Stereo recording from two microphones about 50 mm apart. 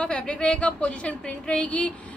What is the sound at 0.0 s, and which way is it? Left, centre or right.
A woman's voice, centre.